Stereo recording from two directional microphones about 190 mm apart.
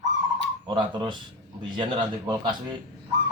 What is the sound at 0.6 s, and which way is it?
Speech, 25° right (ahead or behind).